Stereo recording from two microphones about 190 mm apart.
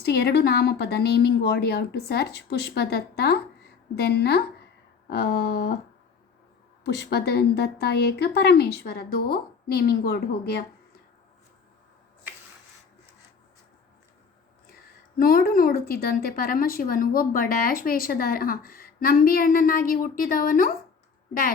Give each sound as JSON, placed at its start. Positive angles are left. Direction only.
{"t": 0.0, "sound": "speech", "side_deg": 55}
{"t": 6.8, "sound": "speech", "side_deg": 60}
{"t": 15.2, "sound": "speech", "side_deg": 50}